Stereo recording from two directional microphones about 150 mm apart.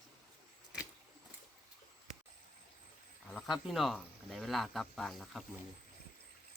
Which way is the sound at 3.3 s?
Centre (ahead or behind).